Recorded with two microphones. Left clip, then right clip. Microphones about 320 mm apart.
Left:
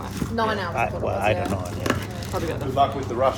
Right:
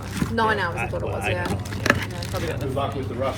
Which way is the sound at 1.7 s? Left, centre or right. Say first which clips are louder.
Right 4 dB; centre.